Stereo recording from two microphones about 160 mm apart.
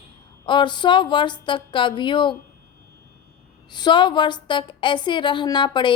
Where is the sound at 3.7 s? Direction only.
30° left (ahead or behind).